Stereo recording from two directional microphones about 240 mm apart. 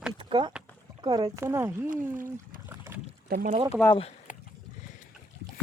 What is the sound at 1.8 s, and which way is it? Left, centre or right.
Speech, right.